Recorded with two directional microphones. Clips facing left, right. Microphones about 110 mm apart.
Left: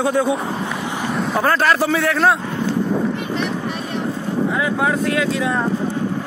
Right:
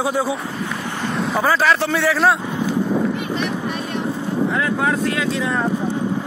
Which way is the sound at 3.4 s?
5° right (ahead or behind).